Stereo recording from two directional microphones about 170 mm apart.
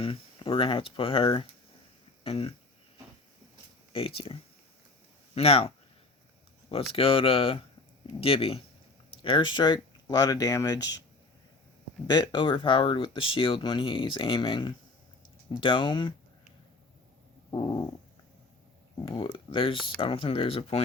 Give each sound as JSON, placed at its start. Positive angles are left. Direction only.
{"t": 0.0, "sound": "speech", "side_deg": 30}
{"t": 3.9, "sound": "speech", "side_deg": 35}
{"t": 6.9, "sound": "speech", "side_deg": 35}
{"t": 12.0, "sound": "speech", "side_deg": 25}
{"t": 17.5, "sound": "speech", "side_deg": 25}
{"t": 19.0, "sound": "speech", "side_deg": 30}